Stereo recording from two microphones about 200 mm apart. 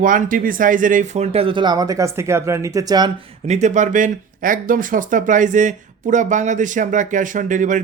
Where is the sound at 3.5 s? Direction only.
35° right (ahead or behind).